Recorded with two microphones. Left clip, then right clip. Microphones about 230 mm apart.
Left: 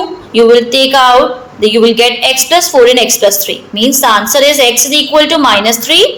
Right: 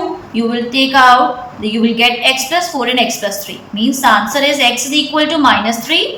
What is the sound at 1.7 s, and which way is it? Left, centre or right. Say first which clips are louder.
A woman's voice: left 4 dB; left.